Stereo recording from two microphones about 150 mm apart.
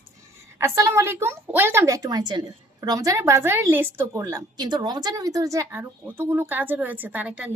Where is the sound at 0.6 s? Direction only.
20° right (ahead or behind).